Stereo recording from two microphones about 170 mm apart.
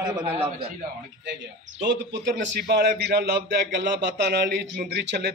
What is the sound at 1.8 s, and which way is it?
A man's voice, 90° right.